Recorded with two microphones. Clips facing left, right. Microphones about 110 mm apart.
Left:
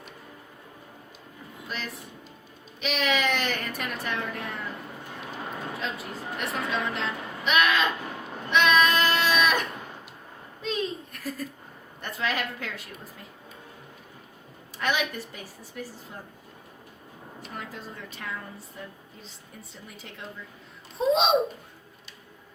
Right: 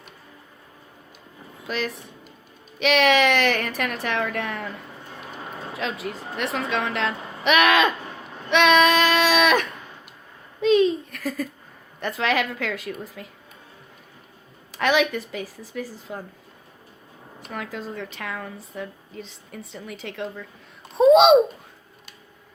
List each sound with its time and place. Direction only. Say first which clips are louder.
1.6 s a woman's voice: right 9 dB; 90° right
5.8 s a woman's voice: right 4 dB; 90° right
8.4 s a sound: right 5 dB; 80° right
11.9 s a woman's voice: right 7 dB; 90° right
14.7 s a woman's voice: right 7 dB; 90° right
17.5 s a woman's voice: right 8 dB; 90° right; by 21.3 s 70° right (ahead or behind)